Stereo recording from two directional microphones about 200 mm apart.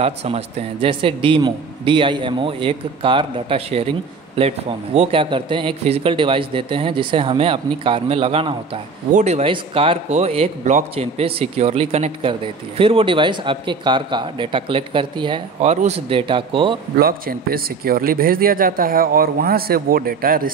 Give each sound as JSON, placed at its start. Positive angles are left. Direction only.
{"t": 0.0, "sound": "a man's voice", "side_deg": -30}
{"t": 17.0, "sound": "a man's voice", "side_deg": -50}